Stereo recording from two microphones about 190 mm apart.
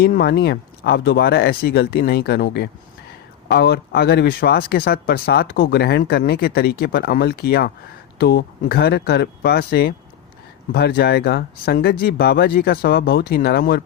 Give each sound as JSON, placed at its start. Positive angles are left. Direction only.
{"t": 0.0, "sound": "speech", "side_deg": 55}